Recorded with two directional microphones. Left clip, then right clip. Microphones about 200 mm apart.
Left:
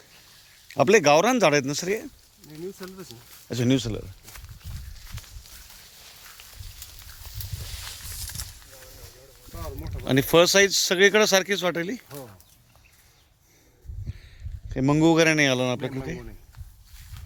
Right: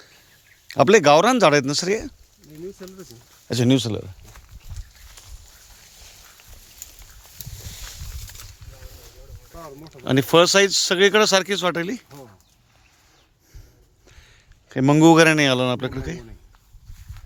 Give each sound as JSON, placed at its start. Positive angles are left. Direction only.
{"t": 0.7, "sound": "speech", "side_deg": -30}
{"t": 3.5, "sound": "speech", "side_deg": -30}
{"t": 4.3, "sound": "pig", "side_deg": 5}
{"t": 8.4, "sound": "a sound", "side_deg": 5}
{"t": 9.5, "sound": "a sound", "side_deg": -20}
{"t": 10.0, "sound": "speech", "side_deg": -25}
{"t": 14.7, "sound": "speech", "side_deg": -40}
{"t": 15.2, "sound": "speech", "side_deg": -25}